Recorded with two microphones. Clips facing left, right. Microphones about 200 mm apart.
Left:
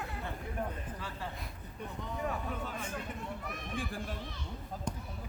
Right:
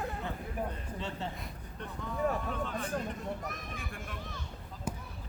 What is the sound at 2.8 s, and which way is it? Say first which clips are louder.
Speech: right 4 dB; 40° right (ahead or behind).